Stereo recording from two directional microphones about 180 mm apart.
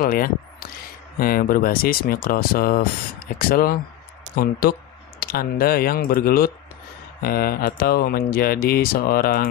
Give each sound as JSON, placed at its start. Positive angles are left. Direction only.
{"t": 0.0, "sound": "speech", "side_deg": 55}